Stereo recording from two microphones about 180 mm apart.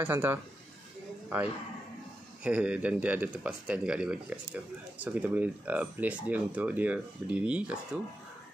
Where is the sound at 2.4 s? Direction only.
5° right (ahead or behind).